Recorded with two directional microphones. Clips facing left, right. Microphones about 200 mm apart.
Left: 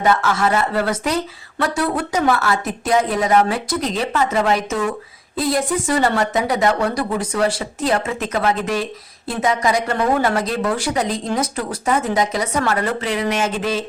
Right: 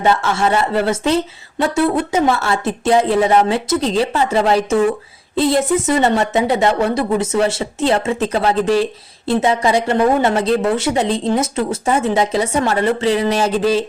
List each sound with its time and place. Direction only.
0.0 s a woman's voice: 25° right (ahead or behind)